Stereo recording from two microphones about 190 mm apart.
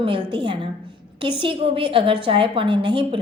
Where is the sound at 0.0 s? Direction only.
25° right (ahead or behind).